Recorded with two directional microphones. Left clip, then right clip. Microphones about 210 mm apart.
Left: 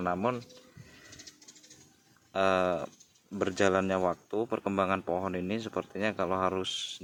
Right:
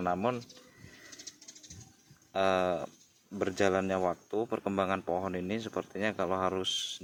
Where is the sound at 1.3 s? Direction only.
15° right (ahead or behind).